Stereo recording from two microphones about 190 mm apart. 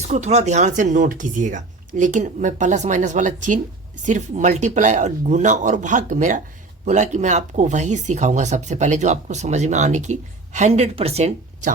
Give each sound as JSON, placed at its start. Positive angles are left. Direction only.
{"t": 0.1, "sound": "speech", "side_deg": -35}